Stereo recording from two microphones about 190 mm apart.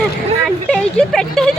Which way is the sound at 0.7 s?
5° left (ahead or behind).